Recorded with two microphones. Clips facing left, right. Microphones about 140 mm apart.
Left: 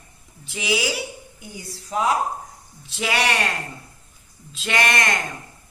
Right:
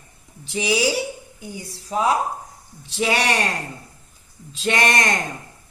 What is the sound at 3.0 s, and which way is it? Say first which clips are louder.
Speech: right 2 dB; 35° right (ahead or behind).